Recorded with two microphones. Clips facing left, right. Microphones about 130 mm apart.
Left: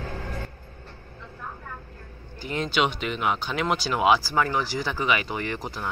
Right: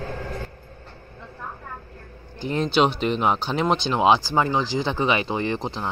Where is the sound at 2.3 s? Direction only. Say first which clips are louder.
Right 5 dB; 30° right (ahead or behind).